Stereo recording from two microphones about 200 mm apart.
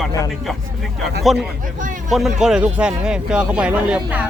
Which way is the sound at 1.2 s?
Centre (ahead or behind).